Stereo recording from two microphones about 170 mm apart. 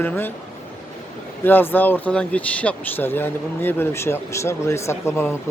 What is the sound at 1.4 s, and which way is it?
Speech, 10° left (ahead or behind).